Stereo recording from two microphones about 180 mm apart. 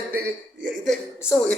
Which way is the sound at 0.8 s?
Centre (ahead or behind).